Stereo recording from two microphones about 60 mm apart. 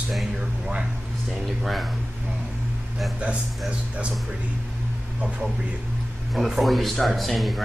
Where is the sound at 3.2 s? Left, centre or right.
Right.